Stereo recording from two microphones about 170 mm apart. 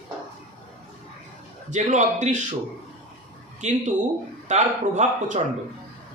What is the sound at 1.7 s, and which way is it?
Speech, 45° right (ahead or behind).